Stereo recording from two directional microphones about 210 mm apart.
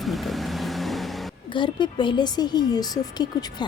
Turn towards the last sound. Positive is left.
turn(degrees=20)  # may be behind; listen again after turning